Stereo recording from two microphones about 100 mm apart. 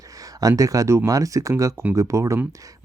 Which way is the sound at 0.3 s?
35° right (ahead or behind).